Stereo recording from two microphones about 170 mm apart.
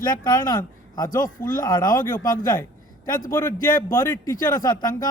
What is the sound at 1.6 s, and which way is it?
Speech, 25° left (ahead or behind).